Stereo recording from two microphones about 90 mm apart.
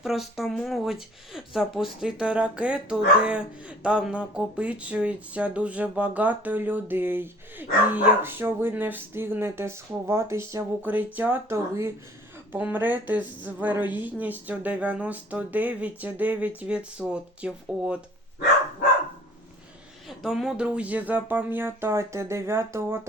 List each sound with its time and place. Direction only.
0.0 s speech: 5° right (ahead or behind); by 10.6 s 30° right (ahead or behind)
10.8 s a woman's voice: 20° right (ahead or behind)
11.5 s speech: 35° right (ahead or behind)
12.5 s a woman's voice: 20° right (ahead or behind)
20.1 s a woman's voice: 5° right (ahead or behind); by 23.0 s 30° right (ahead or behind)